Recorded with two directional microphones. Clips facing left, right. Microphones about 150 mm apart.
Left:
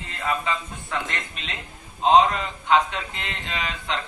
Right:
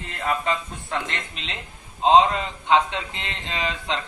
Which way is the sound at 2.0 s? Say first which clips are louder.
Right 1 dB; 25° right (ahead or behind).